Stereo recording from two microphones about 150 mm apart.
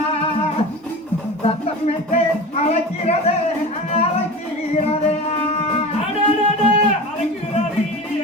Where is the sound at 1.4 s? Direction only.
45° left (ahead or behind).